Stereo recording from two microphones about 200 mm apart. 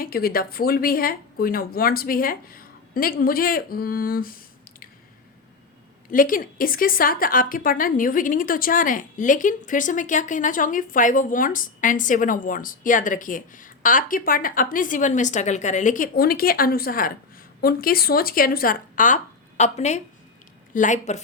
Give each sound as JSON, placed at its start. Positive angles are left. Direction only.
{"t": 0.0, "sound": "speech", "side_deg": 50}
{"t": 6.1, "sound": "a woman's voice", "side_deg": 45}